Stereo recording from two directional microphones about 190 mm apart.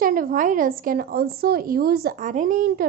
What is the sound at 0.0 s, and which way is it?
A woman's voice, 45° right (ahead or behind).